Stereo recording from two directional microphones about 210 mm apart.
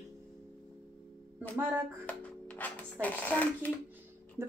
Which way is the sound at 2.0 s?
5° left (ahead or behind).